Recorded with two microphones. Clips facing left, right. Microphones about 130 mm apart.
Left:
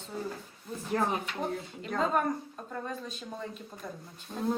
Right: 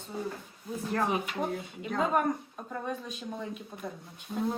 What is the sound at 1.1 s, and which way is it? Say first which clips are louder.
Speech: right 2 dB; 10° right (ahead or behind).